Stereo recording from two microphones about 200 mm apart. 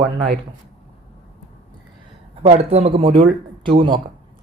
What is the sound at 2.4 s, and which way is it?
Speech, 30° right (ahead or behind).